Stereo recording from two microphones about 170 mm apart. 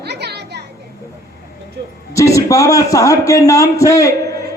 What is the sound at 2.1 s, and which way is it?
A man's voice, 20° left (ahead or behind).